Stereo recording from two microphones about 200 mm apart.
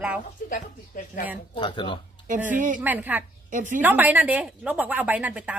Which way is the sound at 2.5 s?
40° right (ahead or behind).